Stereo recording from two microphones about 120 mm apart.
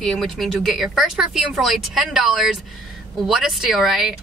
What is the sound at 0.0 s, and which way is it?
Speech, centre (ahead or behind).